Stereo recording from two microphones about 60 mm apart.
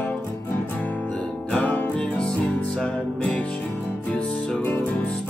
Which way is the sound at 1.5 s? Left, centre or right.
Left.